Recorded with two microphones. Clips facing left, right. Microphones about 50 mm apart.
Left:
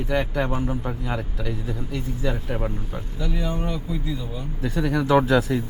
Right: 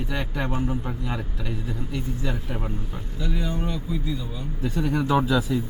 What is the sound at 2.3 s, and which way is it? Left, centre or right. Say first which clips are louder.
Speech: left 4 dB; left.